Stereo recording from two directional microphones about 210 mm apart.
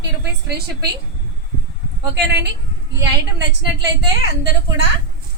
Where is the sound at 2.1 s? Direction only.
55° right (ahead or behind).